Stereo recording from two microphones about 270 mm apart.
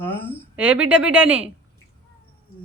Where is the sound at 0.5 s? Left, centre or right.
Centre.